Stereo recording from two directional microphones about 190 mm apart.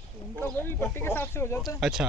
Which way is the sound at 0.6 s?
10° left (ahead or behind).